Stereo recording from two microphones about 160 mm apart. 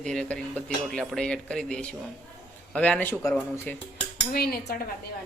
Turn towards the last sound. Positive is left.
turn(degrees=75)  # may be behind; listen again after turning